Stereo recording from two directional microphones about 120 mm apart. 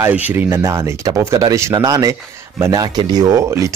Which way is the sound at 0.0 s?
15° right (ahead or behind).